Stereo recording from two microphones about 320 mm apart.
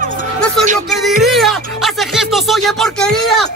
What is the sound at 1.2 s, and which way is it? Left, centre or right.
Speech, centre.